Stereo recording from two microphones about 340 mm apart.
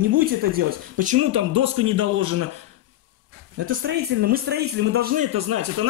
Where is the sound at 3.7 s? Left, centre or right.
Right.